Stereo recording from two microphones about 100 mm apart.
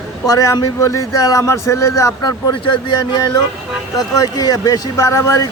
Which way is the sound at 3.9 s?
35° left (ahead or behind).